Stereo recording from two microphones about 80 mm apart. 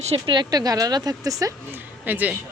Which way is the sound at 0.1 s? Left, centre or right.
Right.